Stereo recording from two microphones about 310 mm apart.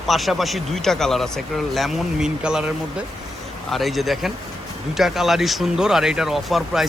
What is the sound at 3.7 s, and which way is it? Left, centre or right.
Speech, centre.